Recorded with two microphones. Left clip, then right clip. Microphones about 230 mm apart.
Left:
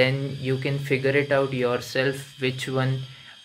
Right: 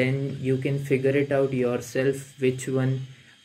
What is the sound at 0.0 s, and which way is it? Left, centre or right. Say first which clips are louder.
Speech: left 4 dB; centre.